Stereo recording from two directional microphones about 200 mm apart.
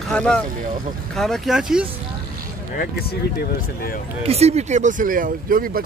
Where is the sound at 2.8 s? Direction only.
50° left (ahead or behind).